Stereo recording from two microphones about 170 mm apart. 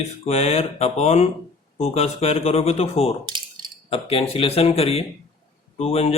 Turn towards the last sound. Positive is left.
turn(degrees=35)  # may be behind; listen again after turning